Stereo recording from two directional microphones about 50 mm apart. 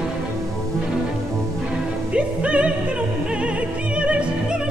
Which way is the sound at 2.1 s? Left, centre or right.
Right.